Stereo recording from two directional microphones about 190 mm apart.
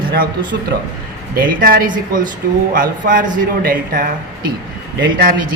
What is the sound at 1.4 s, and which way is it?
A man's voice, 50° right (ahead or behind).